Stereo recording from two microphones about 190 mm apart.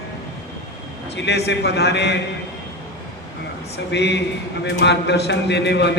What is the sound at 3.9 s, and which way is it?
A man's voice, 65° left (ahead or behind).